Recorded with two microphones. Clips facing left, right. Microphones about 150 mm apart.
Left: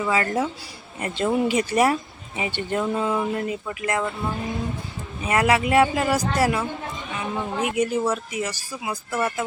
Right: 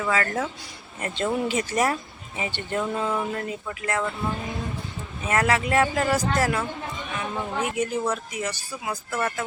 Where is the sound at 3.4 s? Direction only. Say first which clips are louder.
Left 4 dB; 20° left (ahead or behind).